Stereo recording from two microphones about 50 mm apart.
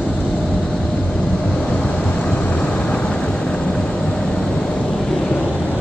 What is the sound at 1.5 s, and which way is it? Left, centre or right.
Vehicle, centre.